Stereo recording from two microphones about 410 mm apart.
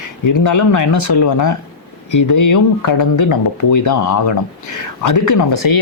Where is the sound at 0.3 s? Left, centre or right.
Left.